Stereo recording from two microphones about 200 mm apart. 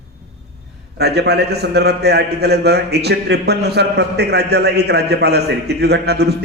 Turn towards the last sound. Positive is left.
turn(degrees=-55)  # may be behind; listen again after turning